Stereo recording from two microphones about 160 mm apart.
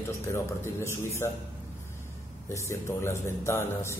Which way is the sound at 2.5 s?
15° left (ahead or behind).